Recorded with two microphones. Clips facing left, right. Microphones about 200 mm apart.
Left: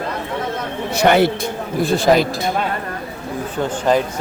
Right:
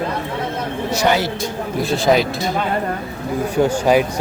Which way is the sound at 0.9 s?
55° left (ahead or behind).